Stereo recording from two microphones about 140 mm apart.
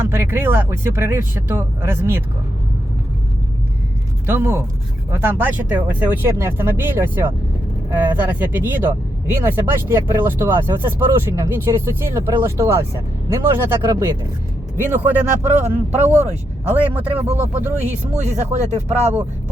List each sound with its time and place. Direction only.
0.0 s speech: 15° right (ahead or behind)
4.3 s speech: 15° right (ahead or behind)
17.2 s speech: 50° right (ahead or behind)